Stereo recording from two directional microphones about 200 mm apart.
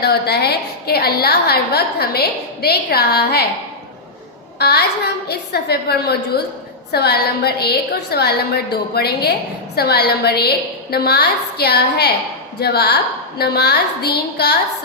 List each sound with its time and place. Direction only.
0.0 s a woman's voice: 55° left (ahead or behind)
4.6 s a woman's voice: 55° left (ahead or behind)